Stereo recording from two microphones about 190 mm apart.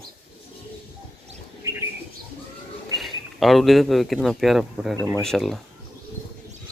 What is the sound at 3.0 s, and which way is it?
Speech, centre (ahead or behind).